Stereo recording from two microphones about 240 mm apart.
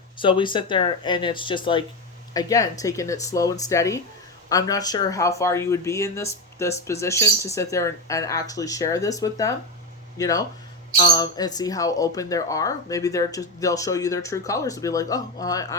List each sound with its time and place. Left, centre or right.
0.2 s speech: centre